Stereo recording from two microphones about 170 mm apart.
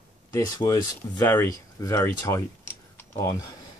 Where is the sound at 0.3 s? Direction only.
20° left (ahead or behind).